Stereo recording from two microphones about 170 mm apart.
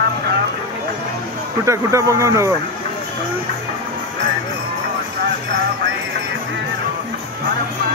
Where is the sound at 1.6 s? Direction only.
15° right (ahead or behind).